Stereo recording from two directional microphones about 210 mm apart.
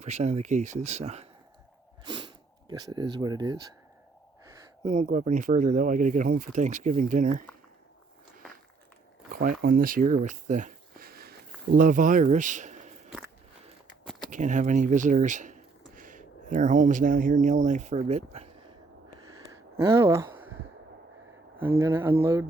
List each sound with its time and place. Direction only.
0.0 s speech: 30° right (ahead or behind)
2.0 s a sound: 20° right (ahead or behind)
4.9 s speech: 35° right (ahead or behind)
9.3 s speech: 40° right (ahead or behind)
14.0 s a sound: centre (ahead or behind)
14.3 s speech: 35° right (ahead or behind)
19.8 s speech: 15° right (ahead or behind)
21.8 s speech: 10° right (ahead or behind)